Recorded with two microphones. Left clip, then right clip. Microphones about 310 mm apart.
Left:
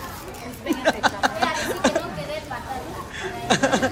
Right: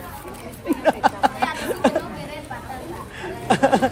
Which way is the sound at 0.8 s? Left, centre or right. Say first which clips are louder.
Right 3 dB; centre.